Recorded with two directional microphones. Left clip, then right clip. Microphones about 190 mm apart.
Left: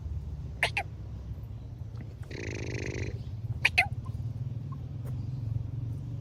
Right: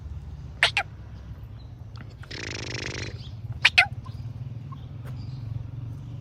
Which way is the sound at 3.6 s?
10° right (ahead or behind).